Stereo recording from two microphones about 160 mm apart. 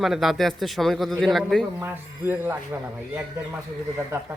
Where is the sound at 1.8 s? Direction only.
15° right (ahead or behind).